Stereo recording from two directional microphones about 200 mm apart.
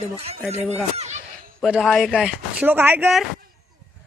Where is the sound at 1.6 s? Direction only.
Centre (ahead or behind).